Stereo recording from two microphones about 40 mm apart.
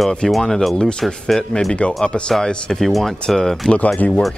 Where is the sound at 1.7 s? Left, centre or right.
Left.